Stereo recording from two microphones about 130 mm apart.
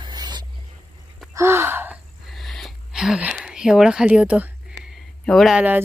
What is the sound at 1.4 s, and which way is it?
Gasp, 20° right (ahead or behind).